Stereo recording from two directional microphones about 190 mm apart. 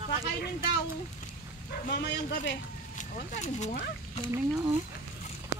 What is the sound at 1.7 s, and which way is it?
Speech, 50° left (ahead or behind).